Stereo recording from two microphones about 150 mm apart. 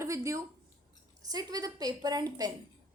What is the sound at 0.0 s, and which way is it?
A woman's voice, 20° right (ahead or behind).